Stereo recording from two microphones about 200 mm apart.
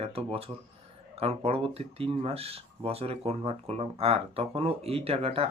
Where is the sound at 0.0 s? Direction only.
30° right (ahead or behind).